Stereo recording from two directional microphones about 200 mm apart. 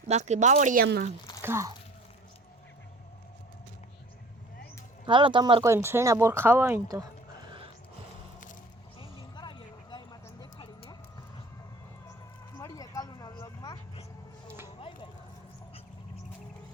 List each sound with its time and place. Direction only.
0.1 s speech: 35° right (ahead or behind)
1.4 s speech: 10° right (ahead or behind)
5.0 s speech: 25° right (ahead or behind)
5.6 s speech: 10° right (ahead or behind)
9.0 s vehicle: 20° left (ahead or behind)
12.5 s a sound: 15° left (ahead or behind)